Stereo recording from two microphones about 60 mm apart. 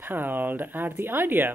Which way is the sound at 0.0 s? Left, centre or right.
Right.